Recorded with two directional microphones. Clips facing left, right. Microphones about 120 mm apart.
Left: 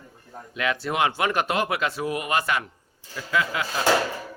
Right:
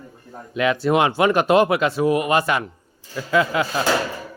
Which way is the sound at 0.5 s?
20° right (ahead or behind).